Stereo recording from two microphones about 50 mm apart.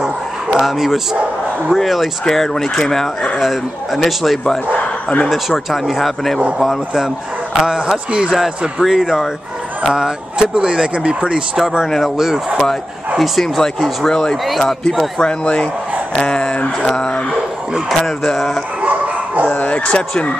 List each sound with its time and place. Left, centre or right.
0.6 s speech: centre
7.5 s a man's voice: centre
8.4 s speech: centre
15.1 s speech: left
18.0 s speech: centre
18.8 s dog: right
19.5 s speech: left